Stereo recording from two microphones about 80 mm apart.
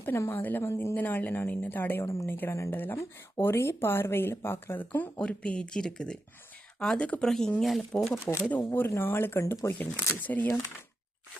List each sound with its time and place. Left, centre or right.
0.3 s speech: left
0.9 s a woman's voice: left
5.2 s speech: centre
8.2 s a woman's voice: left